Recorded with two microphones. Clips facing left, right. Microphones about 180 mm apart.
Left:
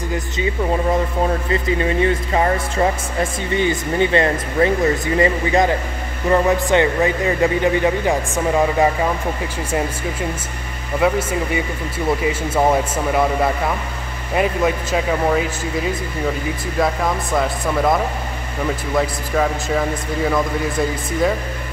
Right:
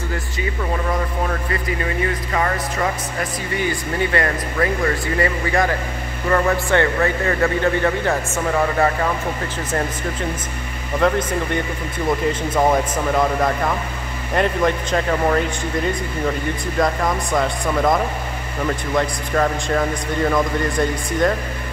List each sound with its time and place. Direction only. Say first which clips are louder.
1.2 s a man's voice: left 4 dB; 25° left (ahead or behind)
11.0 s a man's voice: left 1 dB; 5° left (ahead or behind)